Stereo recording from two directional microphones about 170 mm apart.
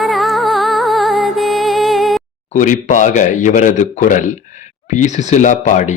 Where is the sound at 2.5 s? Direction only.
45° left (ahead or behind).